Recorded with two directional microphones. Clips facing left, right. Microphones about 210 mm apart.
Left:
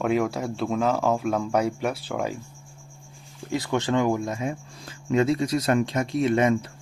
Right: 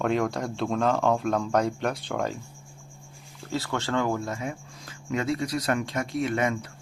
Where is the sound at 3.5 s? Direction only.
15° left (ahead or behind).